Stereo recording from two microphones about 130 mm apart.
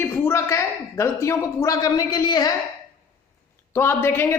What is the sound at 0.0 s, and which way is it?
Speech, 20° left (ahead or behind).